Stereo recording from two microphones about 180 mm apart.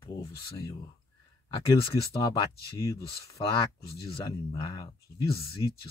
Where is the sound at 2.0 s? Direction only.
20° left (ahead or behind).